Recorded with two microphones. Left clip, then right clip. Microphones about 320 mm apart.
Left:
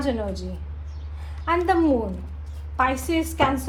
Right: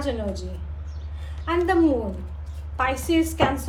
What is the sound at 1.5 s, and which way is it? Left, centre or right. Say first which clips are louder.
Speech: even; centre.